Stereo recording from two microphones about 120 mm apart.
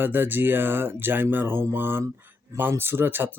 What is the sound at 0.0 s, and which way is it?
Speech, 15° right (ahead or behind).